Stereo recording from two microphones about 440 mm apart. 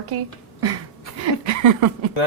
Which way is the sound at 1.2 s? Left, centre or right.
Right.